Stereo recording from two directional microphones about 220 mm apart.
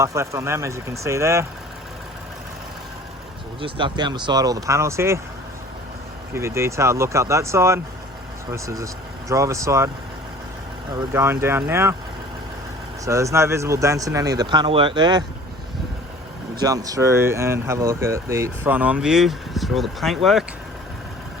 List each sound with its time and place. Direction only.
0.0 s speech: 15° right (ahead or behind)
3.6 s speech: 20° right (ahead or behind)
6.3 s speech: 10° right (ahead or behind)
10.9 s speech: 10° right (ahead or behind)
13.1 s speech: 15° right (ahead or behind)
16.6 s speech: 15° right (ahead or behind); by 20.4 s centre (ahead or behind)